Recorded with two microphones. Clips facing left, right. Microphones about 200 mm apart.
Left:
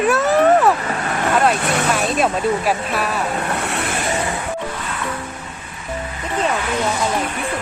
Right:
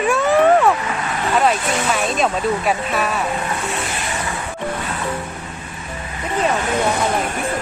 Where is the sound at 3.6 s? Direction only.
65° left (ahead or behind).